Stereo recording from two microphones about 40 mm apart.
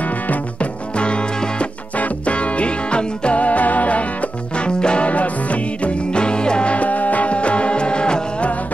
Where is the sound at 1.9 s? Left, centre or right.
Left.